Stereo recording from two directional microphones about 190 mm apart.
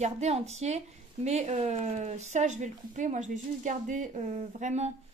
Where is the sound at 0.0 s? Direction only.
35° right (ahead or behind).